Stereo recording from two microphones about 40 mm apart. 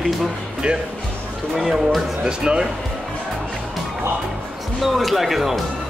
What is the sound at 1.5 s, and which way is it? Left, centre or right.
Speech, centre.